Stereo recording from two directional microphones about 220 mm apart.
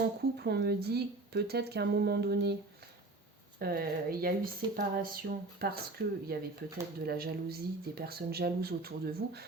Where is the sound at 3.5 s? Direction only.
45° right (ahead or behind).